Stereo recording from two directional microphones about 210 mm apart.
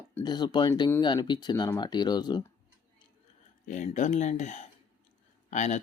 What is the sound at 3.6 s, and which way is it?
Speech, 35° left (ahead or behind).